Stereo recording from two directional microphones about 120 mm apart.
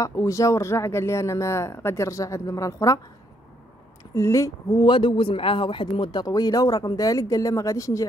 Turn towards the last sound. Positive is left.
turn(degrees=30)  # may be behind; listen again after turning